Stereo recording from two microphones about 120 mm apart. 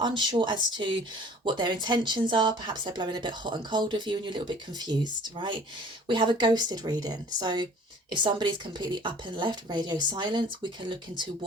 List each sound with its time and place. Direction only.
0.0 s speech: 40° right (ahead or behind)